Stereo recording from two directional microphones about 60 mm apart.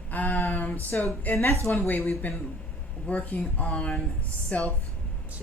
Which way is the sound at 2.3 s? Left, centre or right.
Left.